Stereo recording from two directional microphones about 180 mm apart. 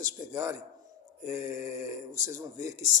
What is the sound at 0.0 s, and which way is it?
Speech, 20° right (ahead or behind).